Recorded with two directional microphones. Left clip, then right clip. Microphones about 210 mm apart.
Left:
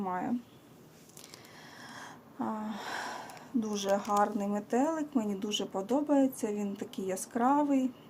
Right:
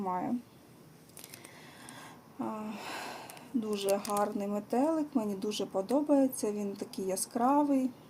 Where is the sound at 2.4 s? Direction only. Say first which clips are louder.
Left 2 dB; 20° left (ahead or behind).